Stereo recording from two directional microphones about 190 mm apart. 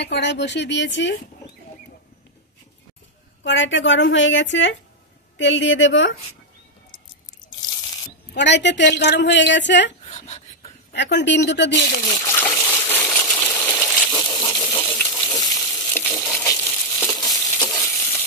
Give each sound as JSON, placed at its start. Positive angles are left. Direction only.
{"t": 0.0, "sound": "a woman's voice", "side_deg": 65}
{"t": 3.4, "sound": "a woman's voice", "side_deg": 75}
{"t": 8.4, "sound": "a woman's voice", "side_deg": 65}
{"t": 10.0, "sound": "a sound", "side_deg": 35}
{"t": 10.9, "sound": "a woman's voice", "side_deg": 65}
{"t": 11.9, "sound": "coin", "side_deg": 15}
{"t": 14.2, "sound": "stir", "side_deg": 20}
{"t": 16.4, "sound": "a sound", "side_deg": 10}
{"t": 17.5, "sound": "stir", "side_deg": 15}